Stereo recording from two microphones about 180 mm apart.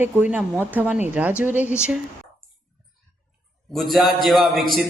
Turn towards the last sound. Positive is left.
turn(degrees=0)  # may be behind; listen again after turning